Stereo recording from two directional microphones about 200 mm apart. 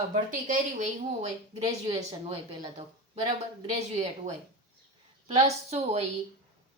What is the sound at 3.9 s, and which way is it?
Speech, 30° right (ahead or behind).